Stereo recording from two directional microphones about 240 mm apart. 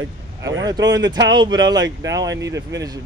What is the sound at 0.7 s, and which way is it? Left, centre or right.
Speech, centre.